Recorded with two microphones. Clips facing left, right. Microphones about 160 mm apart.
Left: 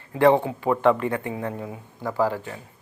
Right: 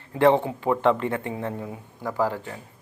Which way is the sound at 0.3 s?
15° left (ahead or behind).